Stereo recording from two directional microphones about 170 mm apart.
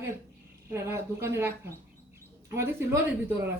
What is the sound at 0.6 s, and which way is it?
A woman's voice, 15° right (ahead or behind).